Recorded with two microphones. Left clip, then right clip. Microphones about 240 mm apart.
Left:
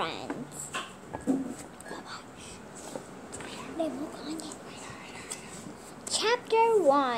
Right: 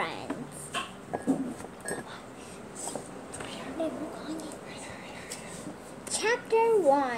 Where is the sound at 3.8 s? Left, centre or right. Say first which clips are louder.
Left 1 dB; left.